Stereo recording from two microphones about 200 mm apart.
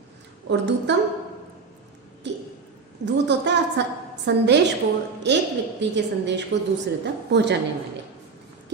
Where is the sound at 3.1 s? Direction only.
60° right (ahead or behind).